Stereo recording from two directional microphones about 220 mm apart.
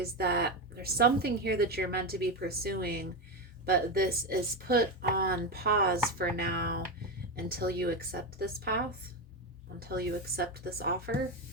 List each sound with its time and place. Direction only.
0.0 s a woman's voice: 45° right (ahead or behind)
9.9 s a woman's voice: 45° right (ahead or behind)